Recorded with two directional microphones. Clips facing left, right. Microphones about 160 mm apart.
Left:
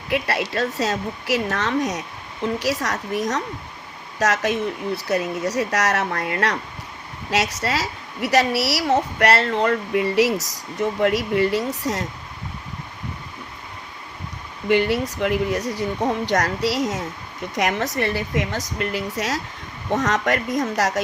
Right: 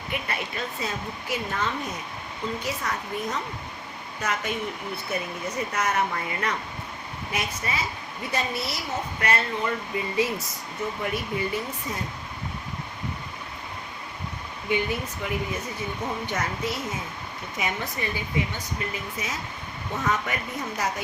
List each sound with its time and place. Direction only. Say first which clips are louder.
0.1 s a woman's voice: left 9 dB; 90° left
14.7 s a woman's voice: left 8 dB; 85° left